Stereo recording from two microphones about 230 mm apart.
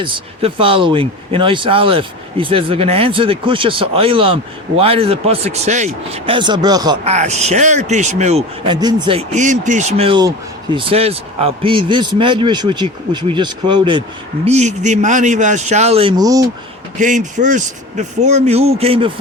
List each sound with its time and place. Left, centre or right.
0.0 s speech: right
7.1 s speech: right
17.0 s speech: right